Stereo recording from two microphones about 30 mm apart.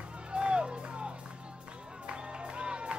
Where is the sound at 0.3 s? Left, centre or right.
Right.